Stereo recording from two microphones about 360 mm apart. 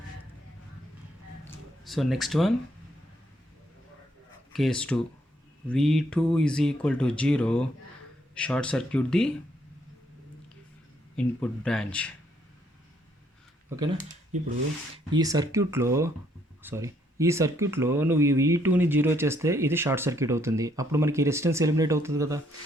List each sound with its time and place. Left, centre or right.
1.8 s speech: centre
4.5 s speech: centre
11.3 s speech: centre
13.7 s speech: centre